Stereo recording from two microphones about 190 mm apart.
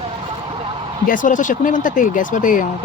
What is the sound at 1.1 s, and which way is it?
Speech, 45° left (ahead or behind).